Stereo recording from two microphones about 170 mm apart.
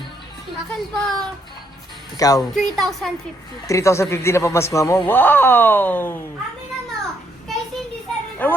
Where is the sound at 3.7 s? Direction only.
20° left (ahead or behind).